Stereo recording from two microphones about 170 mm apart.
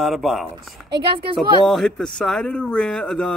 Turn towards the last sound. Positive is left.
turn(degrees=5)  # may be behind; listen again after turning